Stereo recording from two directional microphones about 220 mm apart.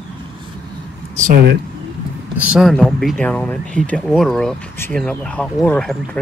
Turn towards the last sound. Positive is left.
turn(degrees=5)  # may be behind; listen again after turning